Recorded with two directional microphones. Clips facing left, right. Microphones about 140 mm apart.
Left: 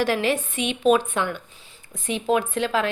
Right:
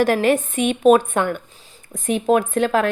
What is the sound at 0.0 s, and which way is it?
Speech, 50° right (ahead or behind).